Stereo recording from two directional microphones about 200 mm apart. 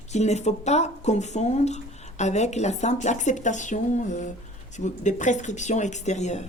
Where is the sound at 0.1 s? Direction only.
35° left (ahead or behind).